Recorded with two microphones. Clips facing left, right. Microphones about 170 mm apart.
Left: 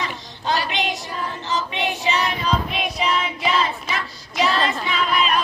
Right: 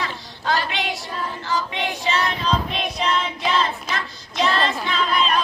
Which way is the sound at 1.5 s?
20° left (ahead or behind).